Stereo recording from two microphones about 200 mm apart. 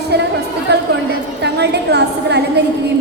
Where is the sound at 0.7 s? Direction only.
55° right (ahead or behind).